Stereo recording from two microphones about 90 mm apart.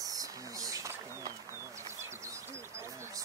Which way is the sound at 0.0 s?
40° right (ahead or behind).